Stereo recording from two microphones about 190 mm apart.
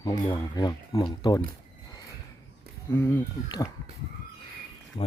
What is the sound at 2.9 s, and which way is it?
Speech, 10° left (ahead or behind).